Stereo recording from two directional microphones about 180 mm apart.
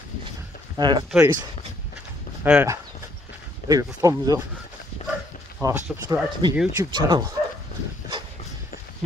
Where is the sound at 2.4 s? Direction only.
10° right (ahead or behind).